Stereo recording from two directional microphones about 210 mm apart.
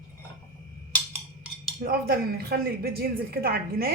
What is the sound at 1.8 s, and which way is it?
A woman's voice, 45° right (ahead or behind).